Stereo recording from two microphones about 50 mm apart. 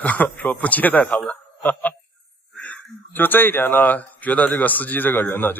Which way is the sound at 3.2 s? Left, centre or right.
Left.